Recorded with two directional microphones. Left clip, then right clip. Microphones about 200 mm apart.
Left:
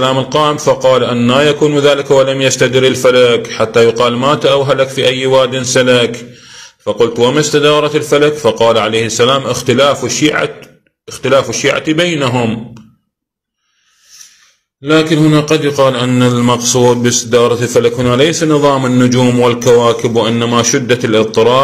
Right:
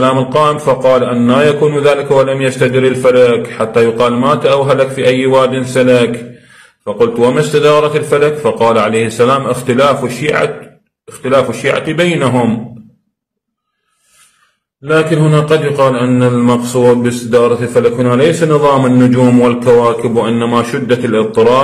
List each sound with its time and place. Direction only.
0.0 s a man's voice: 35° left (ahead or behind)
14.9 s a man's voice: 35° left (ahead or behind)